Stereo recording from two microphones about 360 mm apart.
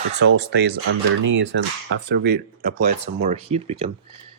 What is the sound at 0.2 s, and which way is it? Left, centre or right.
Speech, right.